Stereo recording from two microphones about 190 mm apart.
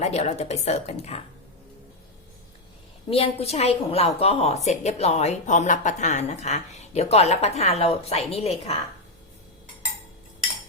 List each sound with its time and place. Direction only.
0.0 s speech: 35° left (ahead or behind)
3.1 s speech: 30° left (ahead or behind)